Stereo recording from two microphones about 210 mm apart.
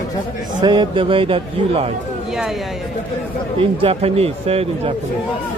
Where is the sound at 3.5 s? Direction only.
25° right (ahead or behind).